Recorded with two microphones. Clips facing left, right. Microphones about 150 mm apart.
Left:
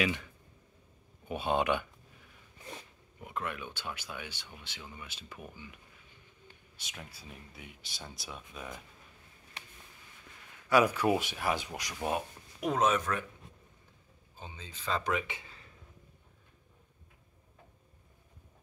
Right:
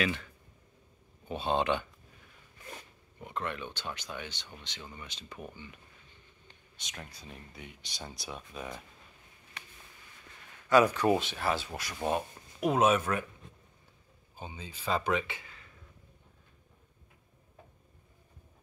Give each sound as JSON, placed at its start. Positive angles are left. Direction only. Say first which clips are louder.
{"t": 0.0, "sound": "speech", "louder": "even", "side_deg": 15}
{"t": 3.2, "sound": "speech", "louder": "right 1 dB", "side_deg": 5}
{"t": 10.7, "sound": "speech", "louder": "right 2 dB", "side_deg": 10}
{"t": 12.6, "sound": "speech", "louder": "right 3 dB", "side_deg": -10}
{"t": 14.4, "sound": "speech", "louder": "right 3 dB", "side_deg": -10}
{"t": 15.2, "sound": "a sound", "louder": "even", "side_deg": 25}